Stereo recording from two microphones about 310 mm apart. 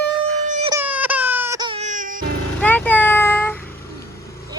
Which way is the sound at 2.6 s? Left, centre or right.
Centre.